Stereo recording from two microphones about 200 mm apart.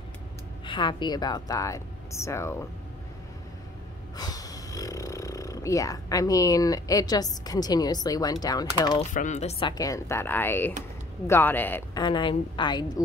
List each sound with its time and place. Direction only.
0.7 s a woman's voice: 25° left (ahead or behind)
4.2 s speech: 20° left (ahead or behind)
9.1 s speech: 35° left (ahead or behind); by 12.0 s 10° left (ahead or behind)
12.0 s a woman's voice: 25° left (ahead or behind)